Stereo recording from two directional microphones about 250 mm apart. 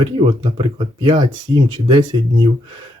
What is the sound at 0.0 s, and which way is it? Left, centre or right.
Speech, right.